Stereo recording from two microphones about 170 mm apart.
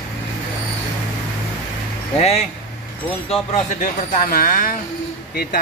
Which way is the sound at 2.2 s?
40° left (ahead or behind).